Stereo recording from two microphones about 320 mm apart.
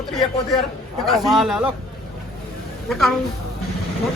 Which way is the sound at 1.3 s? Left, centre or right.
Centre.